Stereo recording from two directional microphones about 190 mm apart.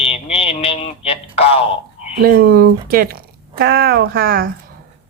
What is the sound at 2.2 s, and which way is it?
Speech, 55° right (ahead or behind).